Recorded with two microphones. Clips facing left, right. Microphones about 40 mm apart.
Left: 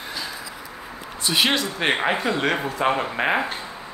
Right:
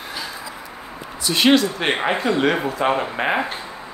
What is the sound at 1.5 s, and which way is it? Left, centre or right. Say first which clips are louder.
A man's voice: right 5 dB; centre.